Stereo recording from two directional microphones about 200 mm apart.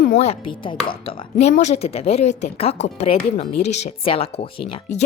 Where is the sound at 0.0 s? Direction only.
35° left (ahead or behind).